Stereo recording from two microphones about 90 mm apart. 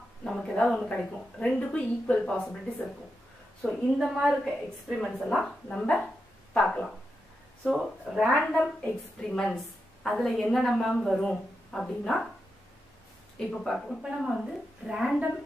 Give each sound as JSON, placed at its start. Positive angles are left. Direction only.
{"t": 0.2, "sound": "a woman's voice", "side_deg": 10}
{"t": 3.6, "sound": "a woman's voice", "side_deg": 0}
{"t": 7.6, "sound": "a woman's voice", "side_deg": -5}
{"t": 13.5, "sound": "a woman's voice", "side_deg": 0}